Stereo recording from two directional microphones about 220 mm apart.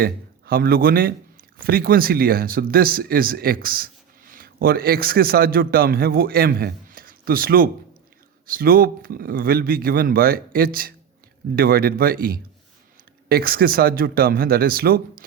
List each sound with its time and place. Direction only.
0.0 s a man's voice: 40° right (ahead or behind)